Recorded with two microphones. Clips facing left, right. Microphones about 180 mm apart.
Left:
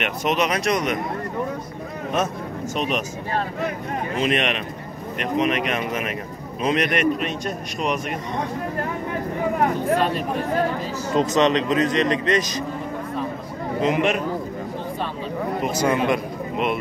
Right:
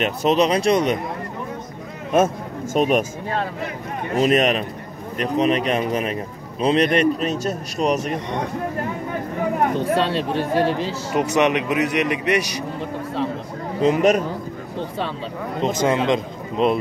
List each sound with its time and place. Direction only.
0.0 s speech: 30° right (ahead or behind)
2.7 s speech: 50° right (ahead or behind)
4.1 s speech: 40° right (ahead or behind)
9.9 s speech: 80° right
11.1 s a man's voice: 10° right (ahead or behind)
13.7 s speech: 35° right (ahead or behind)
15.6 s a man's voice: 25° right (ahead or behind)